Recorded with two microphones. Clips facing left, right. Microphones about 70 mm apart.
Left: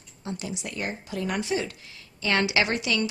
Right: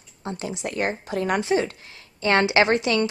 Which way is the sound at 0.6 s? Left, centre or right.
Right.